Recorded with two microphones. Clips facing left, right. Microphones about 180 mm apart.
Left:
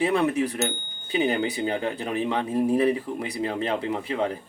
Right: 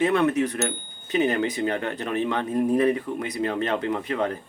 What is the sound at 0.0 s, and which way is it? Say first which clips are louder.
Speech: right 2 dB; 10° left (ahead or behind).